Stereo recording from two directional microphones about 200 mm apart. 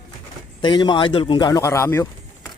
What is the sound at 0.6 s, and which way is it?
Speech, 20° left (ahead or behind).